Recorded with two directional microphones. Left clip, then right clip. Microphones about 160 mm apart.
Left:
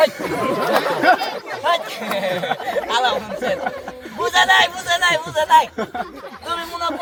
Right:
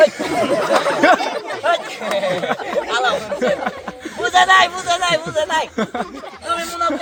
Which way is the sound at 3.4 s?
60° right (ahead or behind).